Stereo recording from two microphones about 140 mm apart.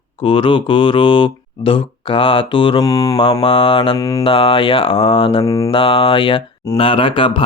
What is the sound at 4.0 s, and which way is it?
Mantra, 25° left (ahead or behind).